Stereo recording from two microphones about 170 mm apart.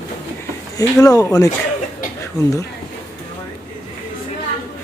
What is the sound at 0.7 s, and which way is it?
Speech, 20° left (ahead or behind).